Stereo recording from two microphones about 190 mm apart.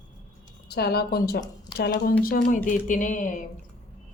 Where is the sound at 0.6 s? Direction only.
60° left (ahead or behind).